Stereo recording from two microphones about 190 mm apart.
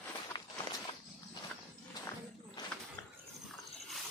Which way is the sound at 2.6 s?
20° left (ahead or behind).